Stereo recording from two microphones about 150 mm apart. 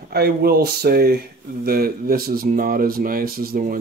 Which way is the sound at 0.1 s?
90° right.